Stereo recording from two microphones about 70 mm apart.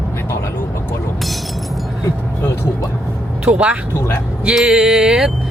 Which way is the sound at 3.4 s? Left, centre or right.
Centre.